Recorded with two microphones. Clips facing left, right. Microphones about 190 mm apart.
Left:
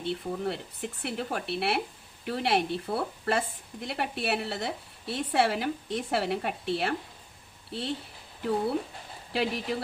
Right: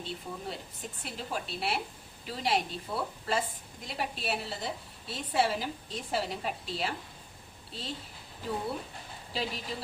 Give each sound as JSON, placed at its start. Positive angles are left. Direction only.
{"t": 0.0, "sound": "a woman's voice", "side_deg": 65}
{"t": 9.3, "sound": "speech", "side_deg": 65}